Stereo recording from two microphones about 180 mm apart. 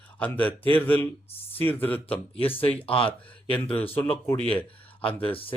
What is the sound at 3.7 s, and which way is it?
Speech, 30° left (ahead or behind).